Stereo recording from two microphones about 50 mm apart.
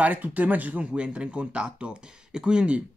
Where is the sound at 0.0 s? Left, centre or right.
Right.